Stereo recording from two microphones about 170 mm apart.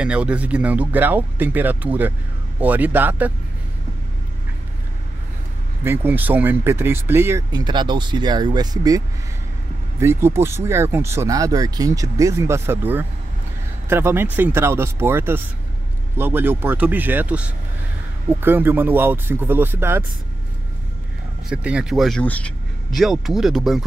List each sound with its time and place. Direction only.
0.0 s speech: 5° right (ahead or behind)
5.9 s speech: 10° right (ahead or behind)
7.5 s speech: 25° right (ahead or behind)
21.5 s speech: 5° right (ahead or behind)